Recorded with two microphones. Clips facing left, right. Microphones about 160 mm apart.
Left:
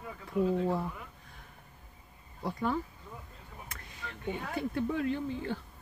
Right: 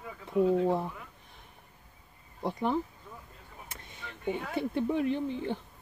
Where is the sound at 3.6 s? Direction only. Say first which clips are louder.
Left 1 dB; 20° right (ahead or behind).